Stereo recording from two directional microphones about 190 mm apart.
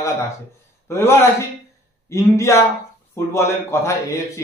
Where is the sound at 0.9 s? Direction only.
15° left (ahead or behind).